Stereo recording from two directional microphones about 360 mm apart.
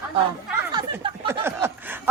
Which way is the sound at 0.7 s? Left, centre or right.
Centre.